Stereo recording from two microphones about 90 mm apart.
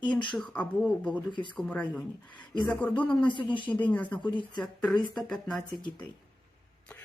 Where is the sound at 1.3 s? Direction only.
60° left (ahead or behind).